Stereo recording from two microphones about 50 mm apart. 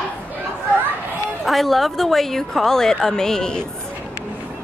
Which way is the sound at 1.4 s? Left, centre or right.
Centre.